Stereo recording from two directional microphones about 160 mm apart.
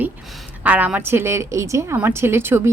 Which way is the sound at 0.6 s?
10° right (ahead or behind).